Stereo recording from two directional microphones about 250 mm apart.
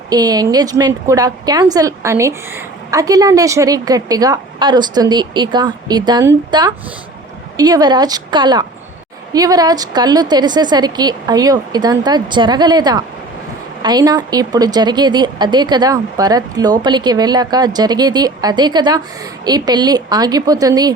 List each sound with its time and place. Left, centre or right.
0.1 s speech: centre